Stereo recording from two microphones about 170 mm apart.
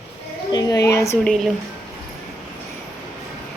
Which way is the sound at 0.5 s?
20° left (ahead or behind).